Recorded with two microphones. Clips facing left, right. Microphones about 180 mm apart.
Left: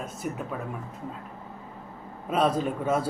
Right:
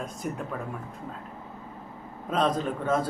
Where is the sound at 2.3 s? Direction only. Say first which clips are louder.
Left 1 dB; 10° left (ahead or behind).